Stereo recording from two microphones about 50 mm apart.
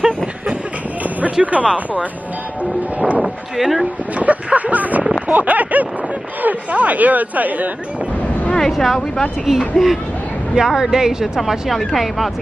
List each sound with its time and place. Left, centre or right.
1.4 s speech: right
3.2 s speech: centre
4.2 s speech: right
8.5 s vehicle: centre
8.8 s speech: centre